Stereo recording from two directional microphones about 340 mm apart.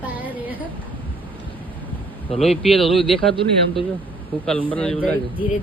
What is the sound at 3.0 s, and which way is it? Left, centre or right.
Speech, centre.